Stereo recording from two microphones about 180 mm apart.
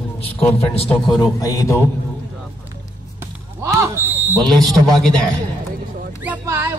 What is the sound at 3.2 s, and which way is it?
Basketball bounce, 15° right (ahead or behind).